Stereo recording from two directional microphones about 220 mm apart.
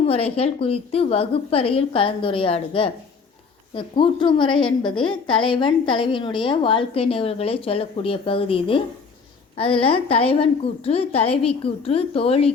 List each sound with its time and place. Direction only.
0.0 s a woman's voice: 25° left (ahead or behind)